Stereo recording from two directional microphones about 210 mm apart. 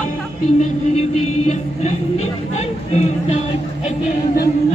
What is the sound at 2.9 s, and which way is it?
Music, 30° left (ahead or behind).